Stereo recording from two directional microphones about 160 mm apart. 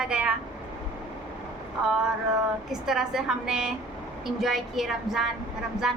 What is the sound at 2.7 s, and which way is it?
A woman's voice, 5° right (ahead or behind).